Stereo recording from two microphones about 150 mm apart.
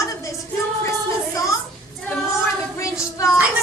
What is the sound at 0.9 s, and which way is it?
Music, 20° left (ahead or behind).